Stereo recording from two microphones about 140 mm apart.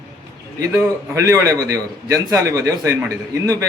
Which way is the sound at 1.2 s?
20° right (ahead or behind).